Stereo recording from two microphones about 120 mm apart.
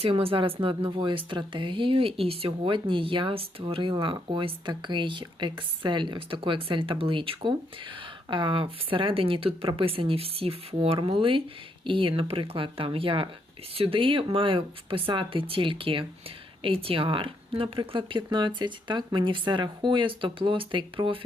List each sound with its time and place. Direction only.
0.0 s speech: 50° right (ahead or behind)